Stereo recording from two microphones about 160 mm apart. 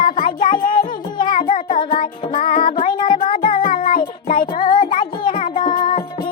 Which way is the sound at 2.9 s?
30° left (ahead or behind).